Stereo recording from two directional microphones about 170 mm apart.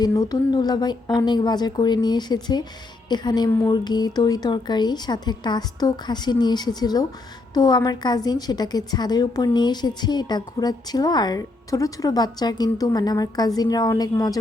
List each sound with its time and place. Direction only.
0.0 s a woman's voice: 20° left (ahead or behind)